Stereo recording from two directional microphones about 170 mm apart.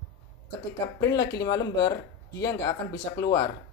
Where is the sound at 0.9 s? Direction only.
20° left (ahead or behind).